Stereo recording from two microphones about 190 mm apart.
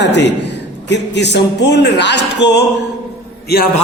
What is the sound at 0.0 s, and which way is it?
Speech, 65° left (ahead or behind).